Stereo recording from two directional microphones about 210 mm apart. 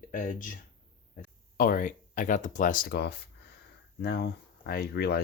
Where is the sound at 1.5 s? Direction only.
40° left (ahead or behind).